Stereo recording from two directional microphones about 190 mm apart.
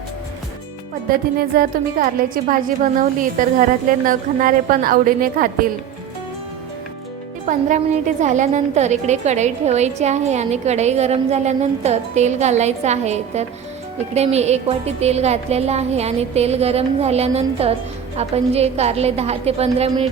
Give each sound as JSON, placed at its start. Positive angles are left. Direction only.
{"t": 1.4, "sound": "a woman's voice", "side_deg": -55}
{"t": 7.4, "sound": "a woman's voice", "side_deg": -40}